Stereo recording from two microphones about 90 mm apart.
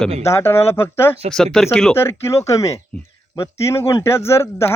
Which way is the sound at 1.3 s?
5° left (ahead or behind).